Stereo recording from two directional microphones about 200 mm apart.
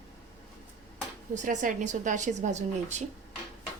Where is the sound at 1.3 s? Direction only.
40° right (ahead or behind).